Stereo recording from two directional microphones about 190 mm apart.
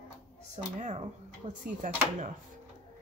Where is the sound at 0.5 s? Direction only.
35° right (ahead or behind).